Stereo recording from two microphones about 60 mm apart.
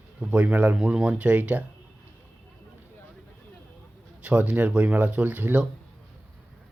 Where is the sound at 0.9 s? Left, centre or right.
Centre.